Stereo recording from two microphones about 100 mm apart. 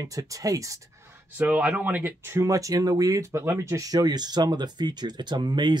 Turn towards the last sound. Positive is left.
turn(degrees=-50)  # may be behind; listen again after turning